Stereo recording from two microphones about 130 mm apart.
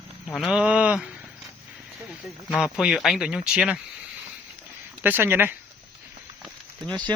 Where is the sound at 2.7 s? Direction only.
5° right (ahead or behind).